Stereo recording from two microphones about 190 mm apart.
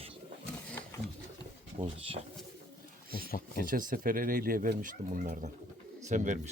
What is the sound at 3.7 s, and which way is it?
Speech, 45° right (ahead or behind).